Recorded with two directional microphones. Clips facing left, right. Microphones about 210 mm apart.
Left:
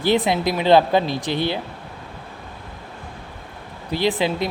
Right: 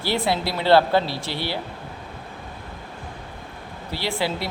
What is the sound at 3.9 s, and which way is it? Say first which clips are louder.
Speech: left 5 dB; 20° left (ahead or behind).